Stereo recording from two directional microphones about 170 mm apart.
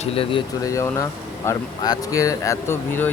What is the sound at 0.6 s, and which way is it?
Speech, 20° left (ahead or behind).